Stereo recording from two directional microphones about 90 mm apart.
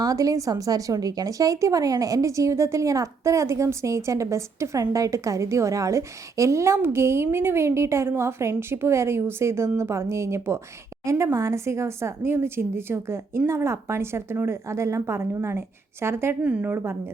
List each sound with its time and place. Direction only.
0.0 s a woman's voice: 40° right (ahead or behind)